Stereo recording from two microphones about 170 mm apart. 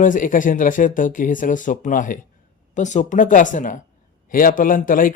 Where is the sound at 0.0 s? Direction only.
50° left (ahead or behind).